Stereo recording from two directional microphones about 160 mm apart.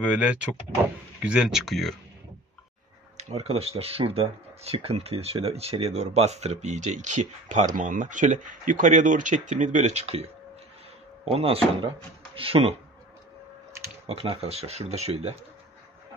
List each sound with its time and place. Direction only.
0.0 s speech: 10° right (ahead or behind)
3.2 s speech: 45° right (ahead or behind)
11.2 s speech: 35° right (ahead or behind)
14.0 s speech: 35° right (ahead or behind)